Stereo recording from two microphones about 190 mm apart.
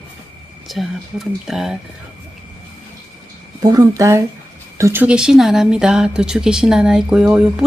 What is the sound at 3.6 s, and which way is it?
Speech, 20° right (ahead or behind).